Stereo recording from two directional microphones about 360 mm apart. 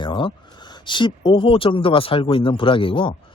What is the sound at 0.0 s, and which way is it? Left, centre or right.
Speech, centre.